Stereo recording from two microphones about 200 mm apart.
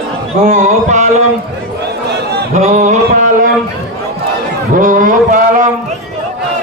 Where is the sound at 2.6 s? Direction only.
35° right (ahead or behind).